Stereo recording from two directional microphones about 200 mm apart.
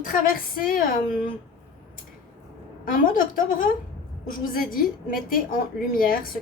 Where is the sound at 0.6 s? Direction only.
45° left (ahead or behind).